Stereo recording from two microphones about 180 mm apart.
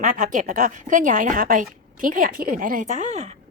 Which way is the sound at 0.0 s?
45° right (ahead or behind).